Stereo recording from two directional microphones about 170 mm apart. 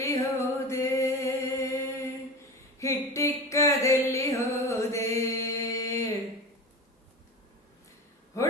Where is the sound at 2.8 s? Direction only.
15° left (ahead or behind).